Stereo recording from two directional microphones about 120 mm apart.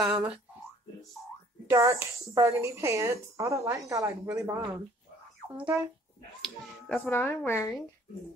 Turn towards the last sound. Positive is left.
turn(degrees=20)  # may be behind; listen again after turning